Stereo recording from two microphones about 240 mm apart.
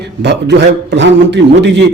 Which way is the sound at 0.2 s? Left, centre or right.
Right.